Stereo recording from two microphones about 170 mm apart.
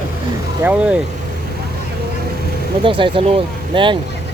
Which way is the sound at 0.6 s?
10° right (ahead or behind).